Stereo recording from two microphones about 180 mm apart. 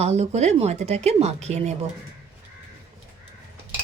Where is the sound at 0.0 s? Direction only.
35° right (ahead or behind).